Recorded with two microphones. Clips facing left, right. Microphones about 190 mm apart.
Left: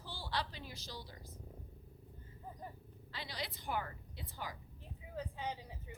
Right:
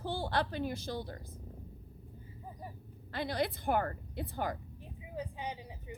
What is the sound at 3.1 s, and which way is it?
A woman's voice, 55° right (ahead or behind).